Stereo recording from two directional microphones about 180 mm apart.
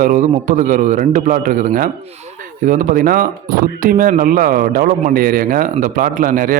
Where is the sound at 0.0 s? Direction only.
45° right (ahead or behind).